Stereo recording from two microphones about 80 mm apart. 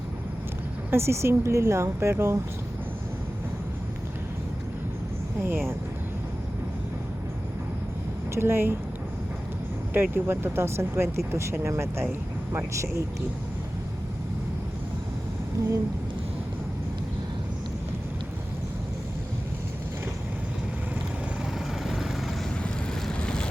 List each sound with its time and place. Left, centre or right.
0.9 s speech: right
5.4 s speech: right
8.4 s speech: right
9.9 s speech: right
15.6 s a sound: right
21.8 s vehicle: centre
22.6 s boat: centre